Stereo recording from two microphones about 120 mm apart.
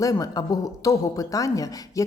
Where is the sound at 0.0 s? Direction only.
30° left (ahead or behind).